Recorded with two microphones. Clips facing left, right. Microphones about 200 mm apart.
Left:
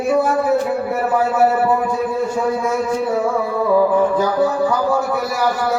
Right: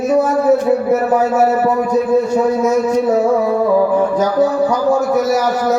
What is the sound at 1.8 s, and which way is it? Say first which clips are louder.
A man's voice: right 6 dB; 40° right (ahead or behind).